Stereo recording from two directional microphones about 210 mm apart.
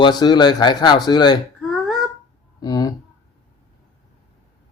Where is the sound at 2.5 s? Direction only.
20° left (ahead or behind).